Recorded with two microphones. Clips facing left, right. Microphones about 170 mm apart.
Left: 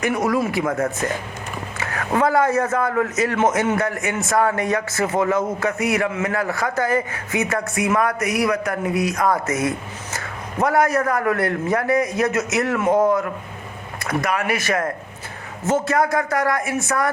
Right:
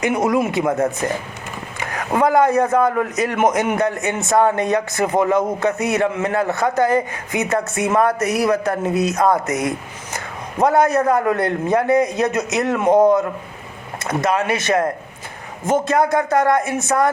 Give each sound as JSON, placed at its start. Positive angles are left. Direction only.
{"t": 0.0, "sound": "a man's voice", "side_deg": -20}